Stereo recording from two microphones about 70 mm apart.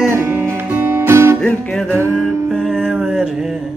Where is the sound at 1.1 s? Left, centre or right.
Right.